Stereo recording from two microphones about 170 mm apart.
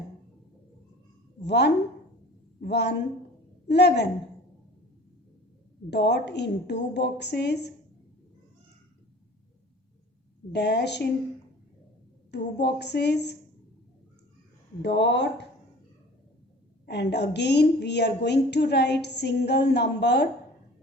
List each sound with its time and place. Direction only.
1.4 s a sound: 85° left
2.6 s a woman's voice: 80° left
5.9 s a woman's voice: 85° left
10.5 s a woman's voice: 80° left
12.3 s a woman's voice: 85° left
14.8 s speech: 90° left
16.8 s a woman's voice: 75° left (ahead or behind)